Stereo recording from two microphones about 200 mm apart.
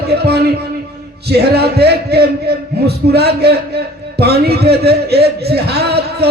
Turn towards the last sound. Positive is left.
turn(degrees=-55)  # may be behind; listen again after turning